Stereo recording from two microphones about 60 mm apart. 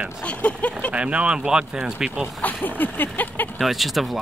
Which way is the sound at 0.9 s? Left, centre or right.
Centre.